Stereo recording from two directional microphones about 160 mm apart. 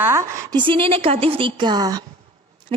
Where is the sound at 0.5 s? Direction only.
30° right (ahead or behind).